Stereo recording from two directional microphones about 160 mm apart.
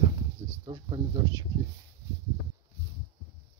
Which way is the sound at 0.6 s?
30° right (ahead or behind).